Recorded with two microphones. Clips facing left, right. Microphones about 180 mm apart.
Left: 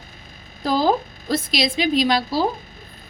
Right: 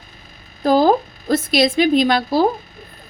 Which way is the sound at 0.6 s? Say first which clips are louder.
Right 5 dB; 50° right (ahead or behind).